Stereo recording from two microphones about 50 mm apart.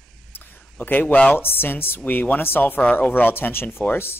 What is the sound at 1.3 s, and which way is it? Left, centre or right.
Speech, left.